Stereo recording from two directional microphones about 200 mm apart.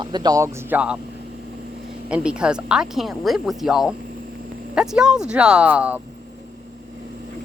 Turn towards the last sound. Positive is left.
turn(degrees=-5)  # may be behind; listen again after turning